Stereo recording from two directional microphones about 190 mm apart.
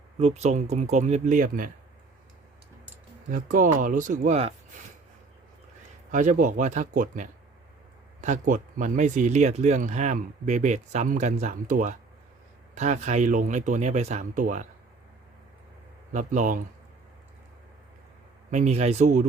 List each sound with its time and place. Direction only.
0.2 s speech: 35° right (ahead or behind)
3.2 s speech: 45° right (ahead or behind)
6.1 s speech: 40° right (ahead or behind)
16.1 s speech: 40° right (ahead or behind)
18.5 s speech: 35° right (ahead or behind)